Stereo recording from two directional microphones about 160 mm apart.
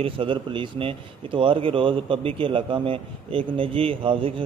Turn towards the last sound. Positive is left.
turn(degrees=-35)  # may be behind; listen again after turning